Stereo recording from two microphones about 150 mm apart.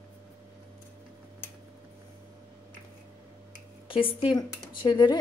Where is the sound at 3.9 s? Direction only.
35° left (ahead or behind).